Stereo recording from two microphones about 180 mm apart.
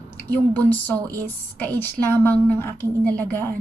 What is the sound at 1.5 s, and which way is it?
A woman's voice, 10° left (ahead or behind).